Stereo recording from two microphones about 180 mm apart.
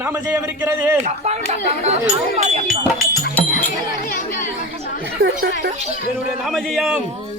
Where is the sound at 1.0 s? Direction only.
35° right (ahead or behind).